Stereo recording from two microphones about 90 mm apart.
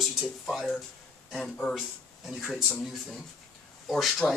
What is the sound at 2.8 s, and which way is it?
Speech, centre (ahead or behind).